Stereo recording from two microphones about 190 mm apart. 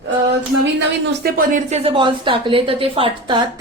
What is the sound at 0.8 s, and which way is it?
Speech, 50° right (ahead or behind).